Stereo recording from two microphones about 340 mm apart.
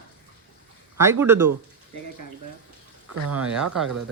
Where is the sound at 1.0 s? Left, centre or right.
Centre.